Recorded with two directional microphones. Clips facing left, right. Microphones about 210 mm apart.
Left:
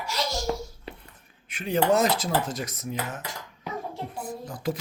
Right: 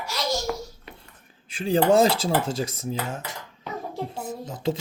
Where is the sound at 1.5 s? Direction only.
30° right (ahead or behind).